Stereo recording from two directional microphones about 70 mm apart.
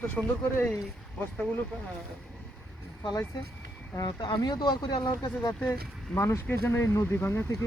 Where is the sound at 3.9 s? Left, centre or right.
Left.